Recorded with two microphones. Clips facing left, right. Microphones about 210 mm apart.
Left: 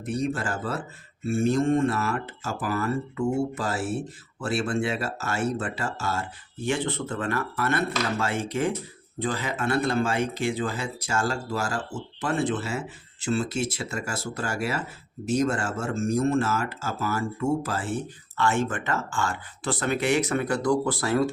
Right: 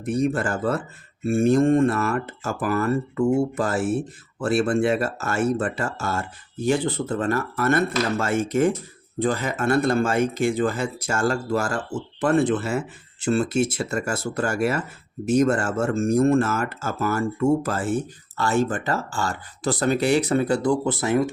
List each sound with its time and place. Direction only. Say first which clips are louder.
0.0 s speech: right 5 dB; 55° right (ahead or behind); by 21.2 s 20° right (ahead or behind)